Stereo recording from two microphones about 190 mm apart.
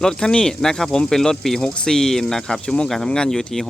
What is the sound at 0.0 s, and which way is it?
Speech, 5° left (ahead or behind).